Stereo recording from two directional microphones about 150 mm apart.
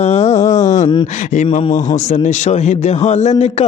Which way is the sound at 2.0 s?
55° left (ahead or behind).